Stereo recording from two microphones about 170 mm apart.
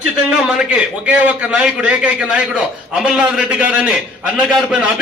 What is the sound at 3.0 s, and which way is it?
A man's voice, 5° right (ahead or behind).